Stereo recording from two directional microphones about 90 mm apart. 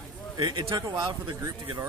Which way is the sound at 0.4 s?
55° right (ahead or behind).